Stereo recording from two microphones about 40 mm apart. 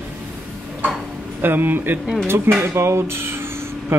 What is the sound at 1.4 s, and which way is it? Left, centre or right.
Speech, right.